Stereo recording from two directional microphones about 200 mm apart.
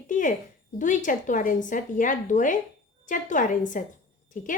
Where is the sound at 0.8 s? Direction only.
40° left (ahead or behind).